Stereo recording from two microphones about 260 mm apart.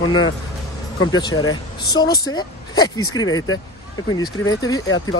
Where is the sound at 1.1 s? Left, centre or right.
Centre.